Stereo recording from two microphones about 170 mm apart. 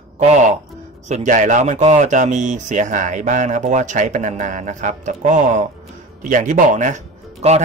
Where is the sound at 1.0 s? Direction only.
45° right (ahead or behind).